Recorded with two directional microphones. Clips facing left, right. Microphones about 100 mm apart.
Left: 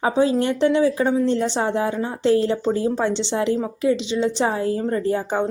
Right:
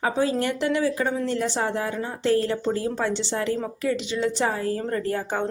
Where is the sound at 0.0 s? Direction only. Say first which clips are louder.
Left 5 dB; 25° left (ahead or behind).